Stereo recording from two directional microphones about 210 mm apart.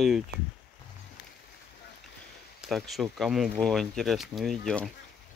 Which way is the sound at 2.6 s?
Centre (ahead or behind).